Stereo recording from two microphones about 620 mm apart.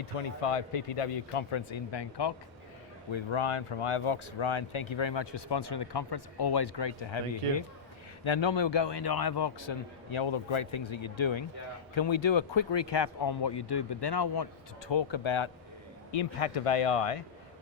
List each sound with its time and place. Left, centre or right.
0.2 s a man's voice: left
16.1 s a man's voice: left